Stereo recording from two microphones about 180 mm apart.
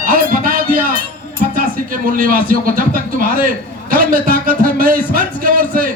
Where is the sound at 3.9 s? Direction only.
50° right (ahead or behind).